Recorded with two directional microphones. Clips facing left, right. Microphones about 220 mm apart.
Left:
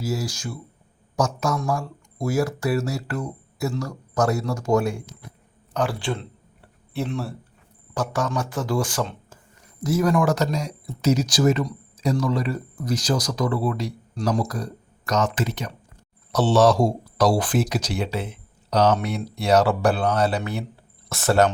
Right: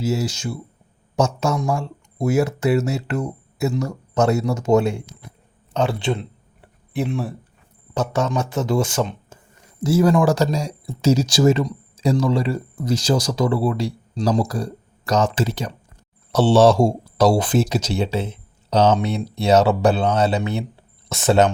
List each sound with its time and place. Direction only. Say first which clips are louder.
0.0 s speech: right 5 dB; 25° right (ahead or behind)